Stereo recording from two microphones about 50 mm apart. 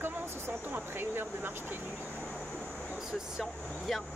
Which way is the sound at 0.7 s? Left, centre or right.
Right.